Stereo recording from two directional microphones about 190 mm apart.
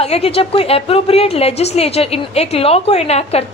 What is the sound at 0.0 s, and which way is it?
A woman's voice, 30° left (ahead or behind).